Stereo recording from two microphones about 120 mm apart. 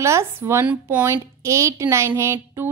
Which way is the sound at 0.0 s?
20° right (ahead or behind).